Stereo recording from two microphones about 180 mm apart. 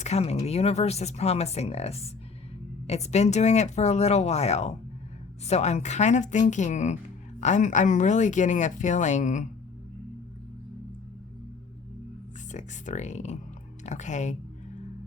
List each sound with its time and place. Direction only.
0.0 s speech: 35° left (ahead or behind)
12.5 s speech: 40° left (ahead or behind)